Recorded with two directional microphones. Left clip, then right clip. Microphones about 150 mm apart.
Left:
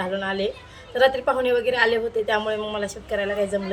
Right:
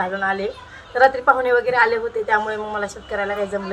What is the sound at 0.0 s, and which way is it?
A woman's voice, 10° left (ahead or behind).